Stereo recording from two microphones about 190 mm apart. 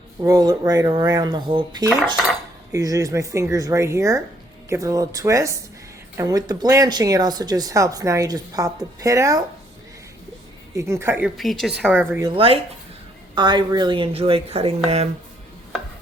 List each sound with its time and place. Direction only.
0.2 s speech: 20° right (ahead or behind)
10.8 s speech: 15° right (ahead or behind)
11.3 s speech: centre (ahead or behind)
12.2 s speech: 25° right (ahead or behind)